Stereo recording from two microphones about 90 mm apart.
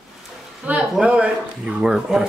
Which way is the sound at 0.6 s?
15° right (ahead or behind).